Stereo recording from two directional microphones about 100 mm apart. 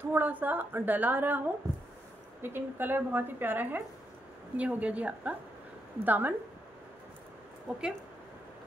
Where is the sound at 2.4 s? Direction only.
20° right (ahead or behind).